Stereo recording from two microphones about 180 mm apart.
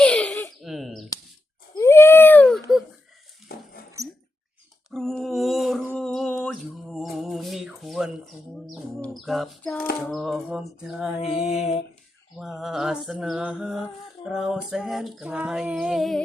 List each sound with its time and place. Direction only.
0.0 s a sound: 5° left (ahead or behind)
1.7 s baby cry: 15° left (ahead or behind)
3.5 s dog: 55° left (ahead or behind)
4.9 s a sound: centre (ahead or behind)
10.1 s female singing: centre (ahead or behind)
11.2 s mantra: 35° left (ahead or behind)
12.4 s female singing: centre (ahead or behind)